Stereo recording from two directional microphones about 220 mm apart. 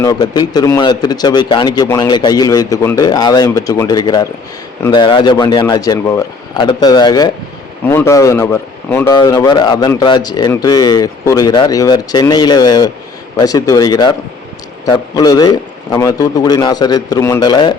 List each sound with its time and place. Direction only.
0.0 s speech: 20° left (ahead or behind)